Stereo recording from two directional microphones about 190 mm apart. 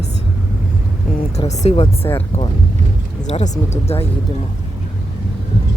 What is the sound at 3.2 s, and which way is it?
Speech, 40° left (ahead or behind).